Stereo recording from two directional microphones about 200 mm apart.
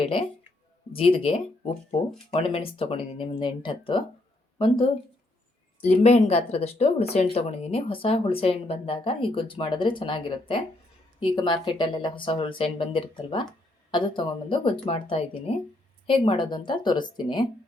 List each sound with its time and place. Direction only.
0.0 s speech: 30° left (ahead or behind)
5.9 s speech: 35° left (ahead or behind)